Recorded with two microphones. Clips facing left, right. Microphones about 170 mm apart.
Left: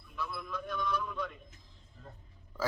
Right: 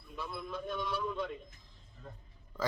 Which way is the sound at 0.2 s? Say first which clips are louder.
Left 1 dB; 25° right (ahead or behind).